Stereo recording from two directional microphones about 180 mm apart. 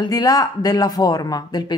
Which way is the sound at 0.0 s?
20° left (ahead or behind).